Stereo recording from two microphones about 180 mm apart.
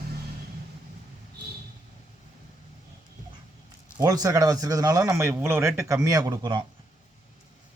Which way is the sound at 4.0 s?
20° right (ahead or behind).